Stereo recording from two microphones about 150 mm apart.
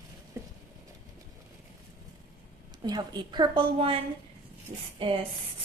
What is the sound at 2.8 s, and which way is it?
A woman's voice, 25° right (ahead or behind).